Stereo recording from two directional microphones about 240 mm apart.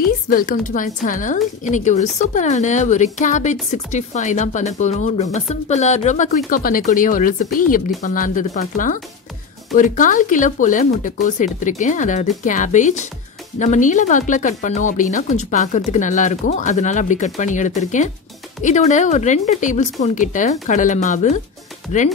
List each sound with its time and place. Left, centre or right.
0.3 s speech: left